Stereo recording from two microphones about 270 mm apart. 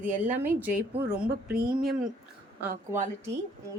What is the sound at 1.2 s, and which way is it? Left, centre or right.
Speech, right.